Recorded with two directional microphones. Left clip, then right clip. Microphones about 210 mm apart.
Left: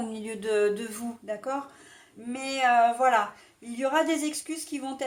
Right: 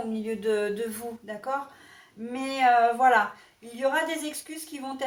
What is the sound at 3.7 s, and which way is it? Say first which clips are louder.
Speech: left 1 dB; 45° left (ahead or behind).